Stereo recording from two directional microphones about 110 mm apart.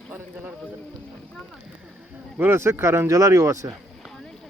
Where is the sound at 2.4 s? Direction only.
20° right (ahead or behind).